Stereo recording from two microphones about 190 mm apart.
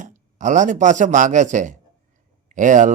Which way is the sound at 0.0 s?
40° right (ahead or behind).